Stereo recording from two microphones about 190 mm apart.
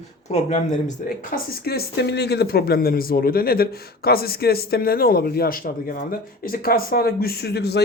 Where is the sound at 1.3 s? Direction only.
55° left (ahead or behind).